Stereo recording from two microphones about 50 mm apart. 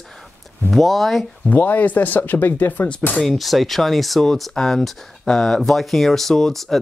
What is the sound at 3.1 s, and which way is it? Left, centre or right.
Speech, centre.